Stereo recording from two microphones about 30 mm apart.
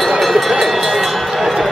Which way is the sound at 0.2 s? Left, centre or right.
Centre.